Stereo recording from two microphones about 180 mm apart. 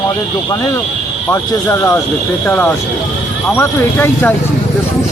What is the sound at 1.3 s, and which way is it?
Speech, 15° left (ahead or behind).